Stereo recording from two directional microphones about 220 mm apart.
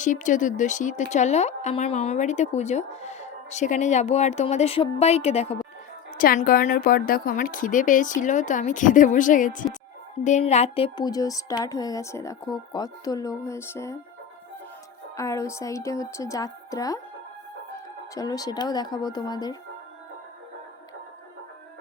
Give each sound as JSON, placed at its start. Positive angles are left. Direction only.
{"t": 0.0, "sound": "speech", "side_deg": 35}
{"t": 6.1, "sound": "speech", "side_deg": 40}
{"t": 15.1, "sound": "speech", "side_deg": 15}
{"t": 18.1, "sound": "speech", "side_deg": 15}